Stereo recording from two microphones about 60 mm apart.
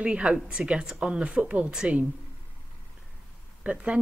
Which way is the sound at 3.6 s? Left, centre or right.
Right.